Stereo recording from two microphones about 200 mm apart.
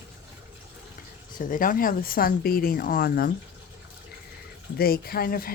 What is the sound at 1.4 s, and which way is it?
Speech, 45° left (ahead or behind).